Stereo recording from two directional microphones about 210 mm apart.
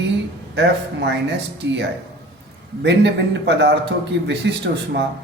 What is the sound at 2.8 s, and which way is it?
A man's voice, 55° right (ahead or behind).